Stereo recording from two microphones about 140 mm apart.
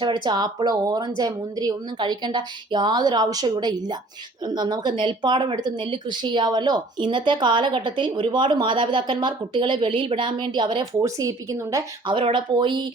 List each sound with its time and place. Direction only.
0.0 s a woman's voice: 35° right (ahead or behind)
11.0 s a woman's voice: 25° right (ahead or behind)
12.0 s speech: 35° right (ahead or behind)